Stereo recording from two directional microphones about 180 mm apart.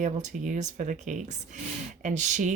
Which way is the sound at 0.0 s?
40° right (ahead or behind).